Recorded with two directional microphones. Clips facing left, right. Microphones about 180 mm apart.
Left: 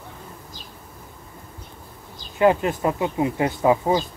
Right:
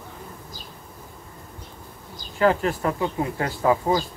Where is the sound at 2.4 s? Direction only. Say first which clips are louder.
Left 2 dB; 20° left (ahead or behind).